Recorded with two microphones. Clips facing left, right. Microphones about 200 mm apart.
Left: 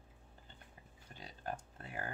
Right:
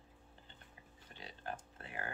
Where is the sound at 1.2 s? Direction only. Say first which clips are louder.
Left 2 dB; 40° left (ahead or behind).